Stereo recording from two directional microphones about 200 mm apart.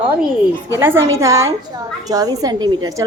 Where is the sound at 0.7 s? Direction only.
15° right (ahead or behind).